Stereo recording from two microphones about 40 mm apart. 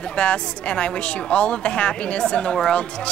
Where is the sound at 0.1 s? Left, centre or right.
Left.